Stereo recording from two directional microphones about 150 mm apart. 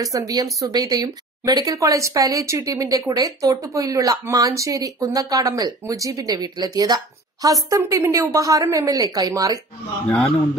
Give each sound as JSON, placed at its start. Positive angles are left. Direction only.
{"t": 0.0, "sound": "speech", "side_deg": -25}
{"t": 10.0, "sound": "a man's voice", "side_deg": 10}